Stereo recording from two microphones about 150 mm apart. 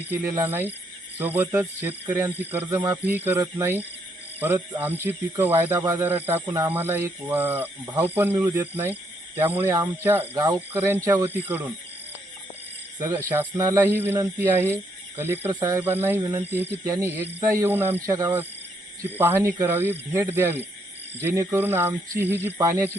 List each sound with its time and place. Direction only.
0.1 s speech: 20° right (ahead or behind)
13.0 s speech: 20° right (ahead or behind)